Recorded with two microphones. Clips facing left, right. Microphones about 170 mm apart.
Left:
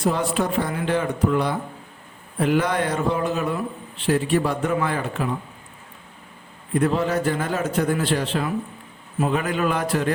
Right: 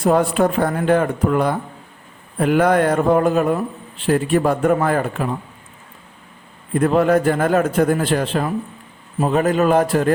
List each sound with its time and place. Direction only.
0.0 s a man's voice: 55° right (ahead or behind)
6.7 s a man's voice: 50° right (ahead or behind)